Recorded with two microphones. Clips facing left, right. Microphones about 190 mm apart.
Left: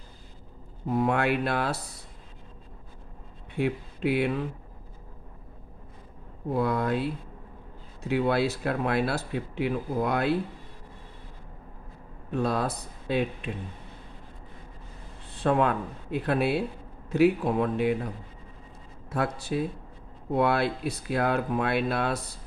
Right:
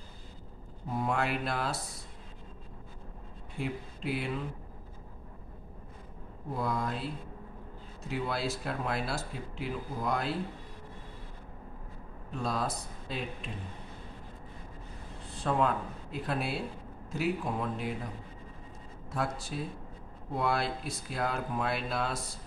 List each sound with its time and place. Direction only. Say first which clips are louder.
0.8 s speech: left 7 dB; 65° left (ahead or behind)
3.5 s speech: left 8 dB; 70° left (ahead or behind)
6.5 s speech: left 7 dB; 65° left (ahead or behind)
8.1 s speech: left 9 dB; 65° left (ahead or behind)
12.3 s speech: left 6 dB; 65° left (ahead or behind)
15.3 s speech: left 5 dB; 65° left (ahead or behind)
19.0 s speech: left 6 dB; 65° left (ahead or behind)